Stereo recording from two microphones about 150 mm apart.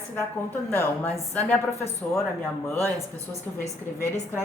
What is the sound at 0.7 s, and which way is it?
Speech, 15° left (ahead or behind).